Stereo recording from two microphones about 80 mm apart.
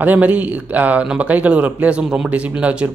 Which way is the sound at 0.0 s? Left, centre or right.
Right.